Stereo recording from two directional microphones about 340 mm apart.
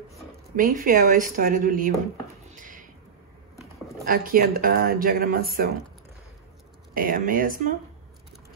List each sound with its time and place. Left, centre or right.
0.6 s speech: right
2.5 s a sound: right
4.0 s speech: right
6.9 s speech: right